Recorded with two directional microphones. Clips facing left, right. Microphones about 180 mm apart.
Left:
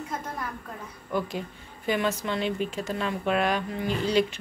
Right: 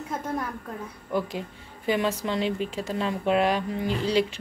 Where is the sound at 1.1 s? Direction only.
30° right (ahead or behind).